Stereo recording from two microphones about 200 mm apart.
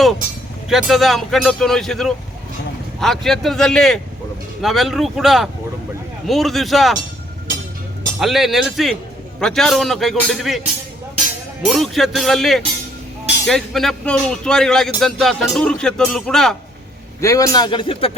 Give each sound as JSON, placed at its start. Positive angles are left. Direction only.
{"t": 0.7, "sound": "speech", "side_deg": 0}
{"t": 8.2, "sound": "speech", "side_deg": 0}
{"t": 17.2, "sound": "a man's voice", "side_deg": 15}